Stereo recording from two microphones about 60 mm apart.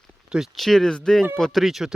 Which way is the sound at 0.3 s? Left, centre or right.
Centre.